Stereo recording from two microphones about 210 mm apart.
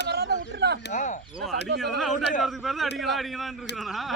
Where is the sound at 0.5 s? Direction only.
50° right (ahead or behind).